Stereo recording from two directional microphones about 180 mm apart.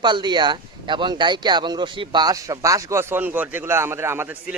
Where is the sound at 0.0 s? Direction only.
25° right (ahead or behind).